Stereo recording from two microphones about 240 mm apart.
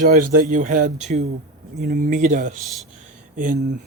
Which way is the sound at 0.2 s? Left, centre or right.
Right.